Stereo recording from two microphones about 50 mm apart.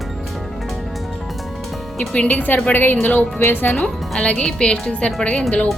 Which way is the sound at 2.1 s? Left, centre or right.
Left.